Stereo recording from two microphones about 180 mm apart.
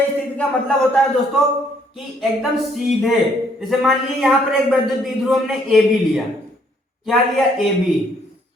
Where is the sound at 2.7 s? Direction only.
Centre (ahead or behind).